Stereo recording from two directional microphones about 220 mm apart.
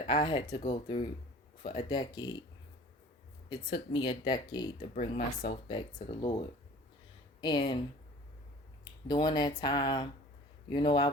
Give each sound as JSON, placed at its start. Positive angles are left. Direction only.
{"t": 0.1, "sound": "speech", "side_deg": 20}
{"t": 3.5, "sound": "speech", "side_deg": 20}
{"t": 4.9, "sound": "speech", "side_deg": 30}
{"t": 7.4, "sound": "speech", "side_deg": 20}
{"t": 8.8, "sound": "speech", "side_deg": 20}